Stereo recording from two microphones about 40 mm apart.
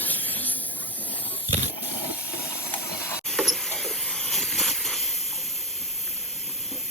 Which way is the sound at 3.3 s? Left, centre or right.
Centre.